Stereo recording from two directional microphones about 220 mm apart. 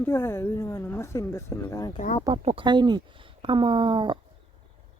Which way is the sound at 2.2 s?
25° right (ahead or behind).